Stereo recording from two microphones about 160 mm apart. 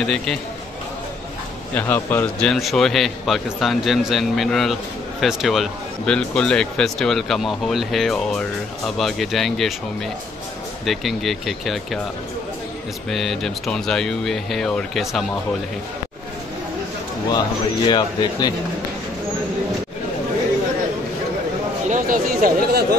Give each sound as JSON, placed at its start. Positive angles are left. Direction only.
{"t": 0.0, "sound": "speech", "side_deg": 5}
{"t": 1.8, "sound": "a man's voice", "side_deg": 15}
{"t": 2.5, "sound": "speech", "side_deg": 0}
{"t": 10.9, "sound": "speech", "side_deg": 0}
{"t": 13.1, "sound": "speech", "side_deg": 0}
{"t": 17.8, "sound": "speech", "side_deg": 30}
{"t": 21.8, "sound": "speech", "side_deg": -55}